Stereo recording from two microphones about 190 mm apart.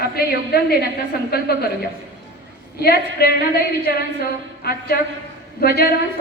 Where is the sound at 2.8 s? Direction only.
55° left (ahead or behind).